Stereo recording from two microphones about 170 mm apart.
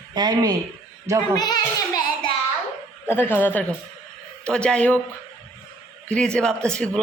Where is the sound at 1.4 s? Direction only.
25° left (ahead or behind).